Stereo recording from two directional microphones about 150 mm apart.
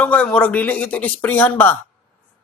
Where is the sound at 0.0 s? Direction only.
10° left (ahead or behind).